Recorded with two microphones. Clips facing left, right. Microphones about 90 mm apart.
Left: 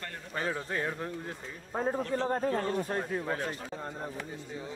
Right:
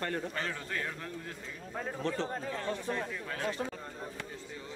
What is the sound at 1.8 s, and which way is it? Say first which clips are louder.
Speech: left 5 dB; 40° left (ahead or behind).